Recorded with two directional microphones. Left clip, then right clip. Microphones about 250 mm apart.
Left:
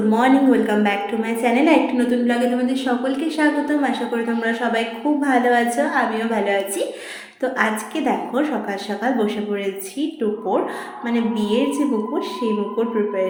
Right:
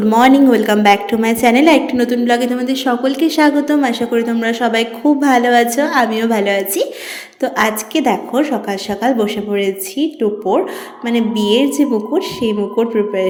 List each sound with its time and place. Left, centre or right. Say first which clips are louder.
0.1 s a woman's voice: right 7 dB; right